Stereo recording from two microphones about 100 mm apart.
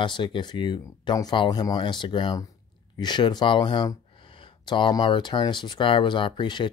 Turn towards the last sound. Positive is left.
turn(degrees=50)  # may be behind; listen again after turning